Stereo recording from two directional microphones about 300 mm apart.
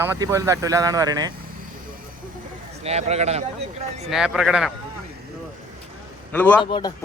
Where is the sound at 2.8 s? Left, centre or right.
Right.